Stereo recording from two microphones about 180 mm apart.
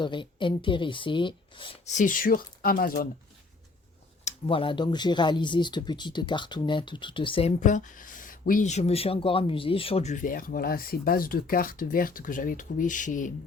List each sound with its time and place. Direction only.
0.0 s speech: 25° left (ahead or behind); by 3.1 s 55° left (ahead or behind)
4.2 s speech: 35° left (ahead or behind)
7.6 s speech: 45° left (ahead or behind)